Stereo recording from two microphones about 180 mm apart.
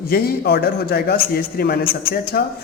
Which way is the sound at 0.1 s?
60° left (ahead or behind).